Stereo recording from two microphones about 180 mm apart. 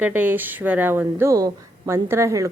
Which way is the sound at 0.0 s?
10° right (ahead or behind).